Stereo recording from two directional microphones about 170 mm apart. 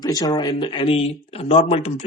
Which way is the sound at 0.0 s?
20° left (ahead or behind).